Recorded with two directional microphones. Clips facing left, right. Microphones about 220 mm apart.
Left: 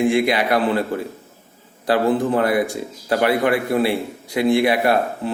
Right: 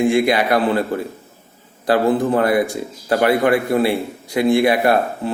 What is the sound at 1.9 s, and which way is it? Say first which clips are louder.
A man's voice: right 2 dB; 45° right (ahead or behind).